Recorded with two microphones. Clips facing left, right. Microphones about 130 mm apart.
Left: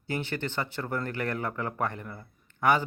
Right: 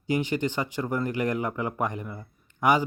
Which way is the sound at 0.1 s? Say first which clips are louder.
Right 6 dB; 15° right (ahead or behind).